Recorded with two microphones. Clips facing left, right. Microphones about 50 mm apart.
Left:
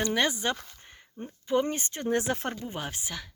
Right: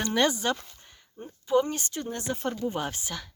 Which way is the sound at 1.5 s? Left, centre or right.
Left.